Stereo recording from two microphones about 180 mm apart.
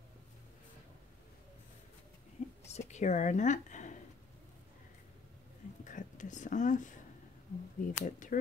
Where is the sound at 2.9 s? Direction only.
40° left (ahead or behind).